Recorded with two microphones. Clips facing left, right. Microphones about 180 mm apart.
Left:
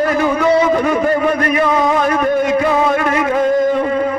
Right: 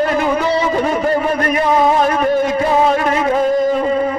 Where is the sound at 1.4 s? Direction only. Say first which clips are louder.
Right 1 dB; 25° right (ahead or behind).